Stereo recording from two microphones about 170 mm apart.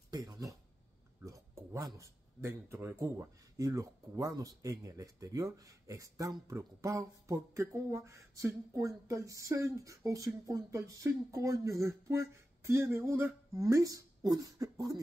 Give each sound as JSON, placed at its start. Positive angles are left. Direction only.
{"t": 0.1, "sound": "speech", "side_deg": -20}